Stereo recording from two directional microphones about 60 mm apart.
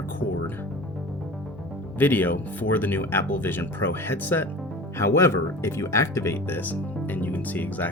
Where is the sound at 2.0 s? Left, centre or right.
Left.